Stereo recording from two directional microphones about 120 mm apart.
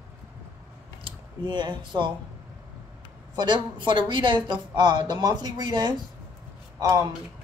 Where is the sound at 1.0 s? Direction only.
40° right (ahead or behind).